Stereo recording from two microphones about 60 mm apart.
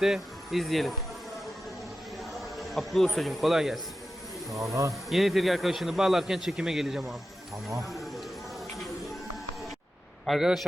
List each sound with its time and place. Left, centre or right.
0.0 s speech: centre
2.6 s speech: centre
4.6 s speech: right
5.0 s speech: centre
10.2 s speech: centre